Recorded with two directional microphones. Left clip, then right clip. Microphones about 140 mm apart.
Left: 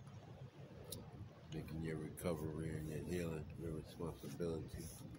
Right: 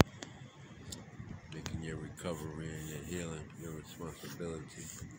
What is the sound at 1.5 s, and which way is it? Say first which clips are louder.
Speech: right 3 dB; 5° left (ahead or behind).